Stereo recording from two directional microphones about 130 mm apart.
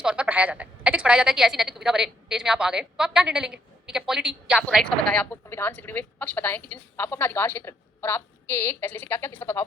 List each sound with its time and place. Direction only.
0.0 s a woman's voice: 5° right (ahead or behind)
4.8 s a woman's voice: 5° left (ahead or behind)
5.3 s a woman's voice: 15° left (ahead or behind)